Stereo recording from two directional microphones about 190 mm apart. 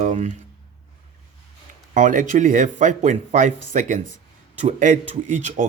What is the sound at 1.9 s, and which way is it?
Speech, 40° right (ahead or behind).